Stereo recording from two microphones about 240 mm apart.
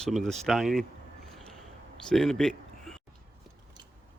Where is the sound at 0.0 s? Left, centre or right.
Centre.